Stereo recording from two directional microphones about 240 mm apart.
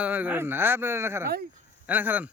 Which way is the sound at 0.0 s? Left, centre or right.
Centre.